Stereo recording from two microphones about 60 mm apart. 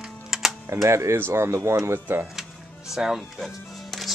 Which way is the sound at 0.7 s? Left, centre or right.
Right.